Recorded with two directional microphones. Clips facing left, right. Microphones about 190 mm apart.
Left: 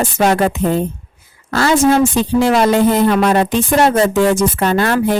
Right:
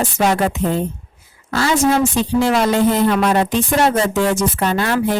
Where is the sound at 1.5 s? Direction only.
55° left (ahead or behind).